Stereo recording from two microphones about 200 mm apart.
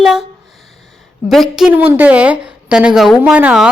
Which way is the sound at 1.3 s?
Centre (ahead or behind).